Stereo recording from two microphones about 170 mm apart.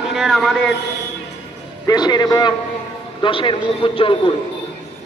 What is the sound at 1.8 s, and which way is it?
A man's voice, 25° left (ahead or behind).